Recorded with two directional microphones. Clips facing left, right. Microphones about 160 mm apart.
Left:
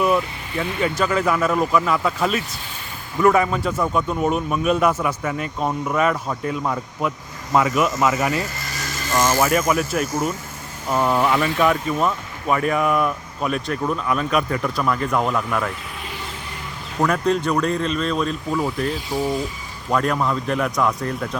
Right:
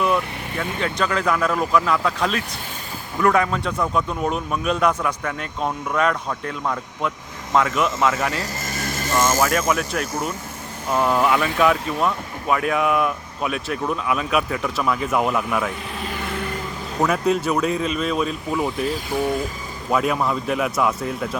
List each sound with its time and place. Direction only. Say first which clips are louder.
0.6 s speech: left 2 dB; 5° left (ahead or behind)
8.8 s vehicle: right 3 dB; 55° right (ahead or behind)
9.2 s speech: left 2 dB; 5° left (ahead or behind)
16.1 s vehicle: right 6 dB; 55° right (ahead or behind)
17.0 s speech: even; 5° right (ahead or behind)
19.9 s speech: even; 5° right (ahead or behind)